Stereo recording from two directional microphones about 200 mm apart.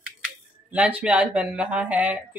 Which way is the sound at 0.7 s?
5° right (ahead or behind).